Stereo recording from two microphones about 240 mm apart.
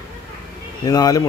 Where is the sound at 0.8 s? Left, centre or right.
Centre.